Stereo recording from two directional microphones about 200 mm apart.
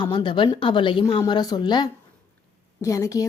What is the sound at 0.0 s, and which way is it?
Speech, 20° left (ahead or behind).